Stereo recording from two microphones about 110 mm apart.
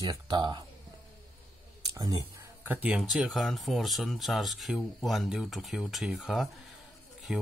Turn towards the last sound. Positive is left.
turn(degrees=-5)  # may be behind; listen again after turning